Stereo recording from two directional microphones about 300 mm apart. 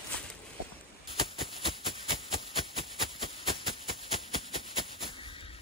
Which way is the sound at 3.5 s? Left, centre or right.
Centre.